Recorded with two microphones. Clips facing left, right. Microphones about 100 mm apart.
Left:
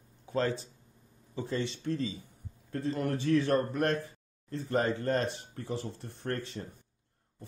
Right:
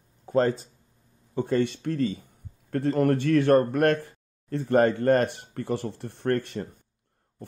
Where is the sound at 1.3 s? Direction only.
55° right (ahead or behind).